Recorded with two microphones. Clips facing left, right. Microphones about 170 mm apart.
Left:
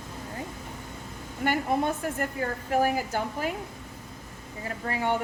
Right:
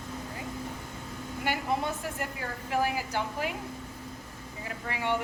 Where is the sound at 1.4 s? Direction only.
50° left (ahead or behind).